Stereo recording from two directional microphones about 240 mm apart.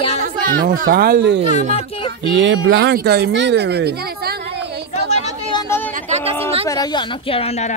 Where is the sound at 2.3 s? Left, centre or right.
Right.